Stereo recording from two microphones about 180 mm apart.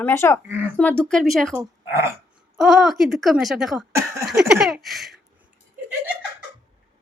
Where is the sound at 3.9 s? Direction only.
15° right (ahead or behind).